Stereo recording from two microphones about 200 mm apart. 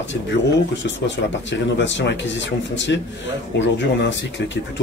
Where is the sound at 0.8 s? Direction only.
65° left (ahead or behind).